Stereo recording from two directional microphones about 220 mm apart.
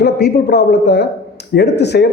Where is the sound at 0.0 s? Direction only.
50° left (ahead or behind).